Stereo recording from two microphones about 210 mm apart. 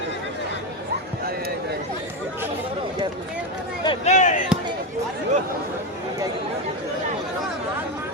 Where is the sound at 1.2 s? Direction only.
45° right (ahead or behind).